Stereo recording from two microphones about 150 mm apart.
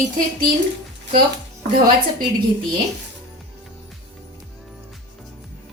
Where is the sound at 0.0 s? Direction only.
75° right (ahead or behind).